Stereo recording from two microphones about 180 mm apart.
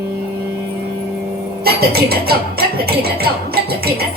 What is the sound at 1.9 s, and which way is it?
Music, 60° right (ahead or behind).